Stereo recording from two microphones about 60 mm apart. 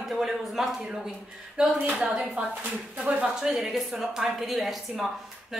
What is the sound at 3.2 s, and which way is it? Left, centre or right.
A woman's voice, centre.